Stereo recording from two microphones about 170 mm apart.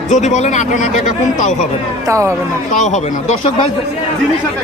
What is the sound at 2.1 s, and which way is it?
Speech, 15° right (ahead or behind).